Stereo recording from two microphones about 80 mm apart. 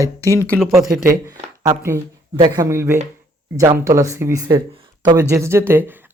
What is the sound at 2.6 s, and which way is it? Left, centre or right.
Speech, right.